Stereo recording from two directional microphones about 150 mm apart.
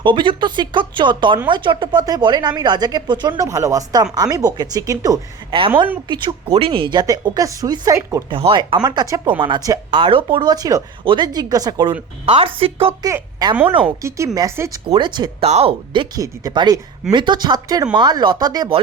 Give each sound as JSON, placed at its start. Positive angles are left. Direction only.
{"t": 0.0, "sound": "speech", "side_deg": -35}
{"t": 6.1, "sound": "speech", "side_deg": -35}
{"t": 8.3, "sound": "speech", "side_deg": -35}
{"t": 12.2, "sound": "speech", "side_deg": -40}
{"t": 13.0, "sound": "a woman's voice", "side_deg": -25}
{"t": 14.9, "sound": "speech", "side_deg": -30}
{"t": 15.4, "sound": "speech", "side_deg": -45}
{"t": 15.9, "sound": "speech", "side_deg": -30}